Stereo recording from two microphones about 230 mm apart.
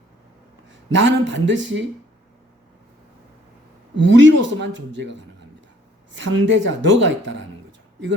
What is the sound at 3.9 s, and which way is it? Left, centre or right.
Speech, right.